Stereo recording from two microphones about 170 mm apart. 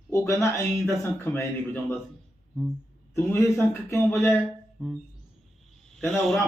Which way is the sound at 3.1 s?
15° left (ahead or behind).